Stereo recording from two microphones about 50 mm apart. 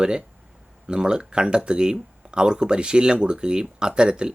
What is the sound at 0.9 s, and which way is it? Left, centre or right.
A man's voice, centre.